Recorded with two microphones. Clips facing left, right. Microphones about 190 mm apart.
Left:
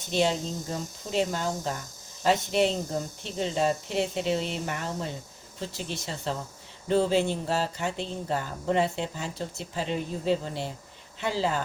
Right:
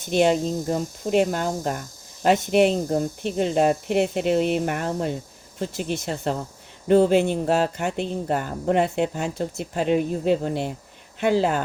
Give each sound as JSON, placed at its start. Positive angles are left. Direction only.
{"t": 0.1, "sound": "speech", "side_deg": -55}